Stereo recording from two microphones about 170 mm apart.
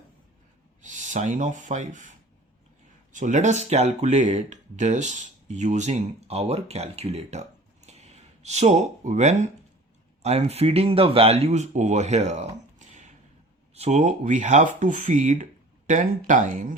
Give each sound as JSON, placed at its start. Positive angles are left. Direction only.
{"t": 0.8, "sound": "speech", "side_deg": -45}
{"t": 7.9, "sound": "a sound", "side_deg": -40}
{"t": 10.2, "sound": "speech", "side_deg": -40}